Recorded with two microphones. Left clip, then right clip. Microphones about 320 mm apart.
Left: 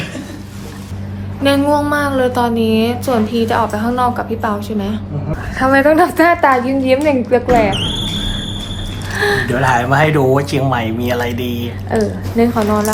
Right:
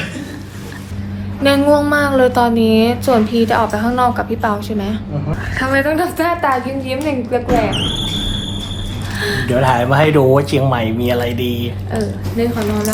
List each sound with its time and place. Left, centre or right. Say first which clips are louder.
1.5 s a woman's voice: right 1 dB; centre; by 7.7 s left
7.7 s basketball bounce: left 1 dB; centre
9.1 s a sound: left 5 dB; left
9.5 s speech: even; centre
12.4 s a woman's voice: left 4 dB; centre